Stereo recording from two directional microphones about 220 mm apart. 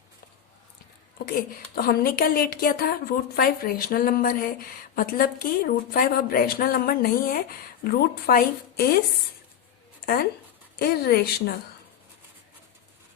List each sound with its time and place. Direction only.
1.2 s a woman's voice: 40° left (ahead or behind)
10.8 s a woman's voice: 45° left (ahead or behind)